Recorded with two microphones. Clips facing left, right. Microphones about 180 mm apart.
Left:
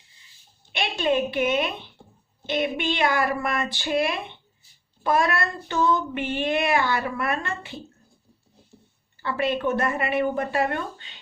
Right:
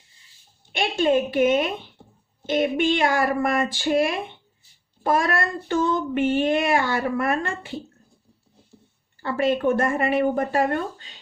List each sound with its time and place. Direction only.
0.7 s child singing: 45° right (ahead or behind)
9.2 s child singing: 45° right (ahead or behind)
10.3 s speech: 40° right (ahead or behind)